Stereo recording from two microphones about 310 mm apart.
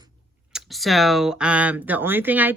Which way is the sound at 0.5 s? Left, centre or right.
Centre.